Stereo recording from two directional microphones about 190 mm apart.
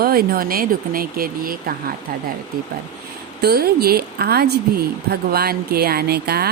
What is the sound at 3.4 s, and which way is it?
A woman's voice, 55° right (ahead or behind).